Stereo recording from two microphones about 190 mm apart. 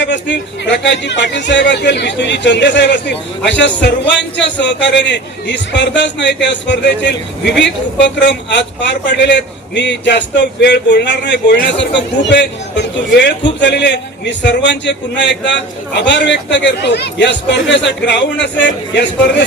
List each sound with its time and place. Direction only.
0.0 s a man's voice: 65° left (ahead or behind)